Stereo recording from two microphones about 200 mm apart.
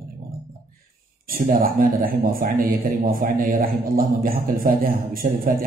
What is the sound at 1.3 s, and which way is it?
Speech, 45° right (ahead or behind).